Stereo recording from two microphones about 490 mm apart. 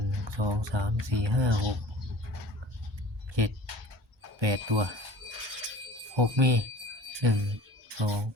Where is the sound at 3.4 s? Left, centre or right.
Right.